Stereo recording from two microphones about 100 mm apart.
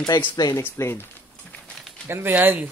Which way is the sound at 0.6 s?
25° left (ahead or behind).